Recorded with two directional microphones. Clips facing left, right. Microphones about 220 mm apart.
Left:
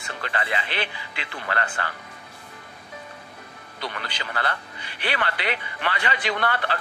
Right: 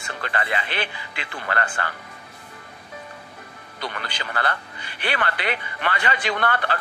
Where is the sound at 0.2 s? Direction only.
50° right (ahead or behind).